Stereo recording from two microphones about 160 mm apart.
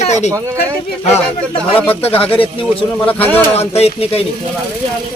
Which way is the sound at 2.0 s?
35° left (ahead or behind).